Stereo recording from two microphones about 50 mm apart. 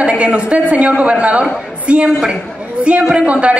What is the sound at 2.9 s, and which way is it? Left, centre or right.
Speech, right.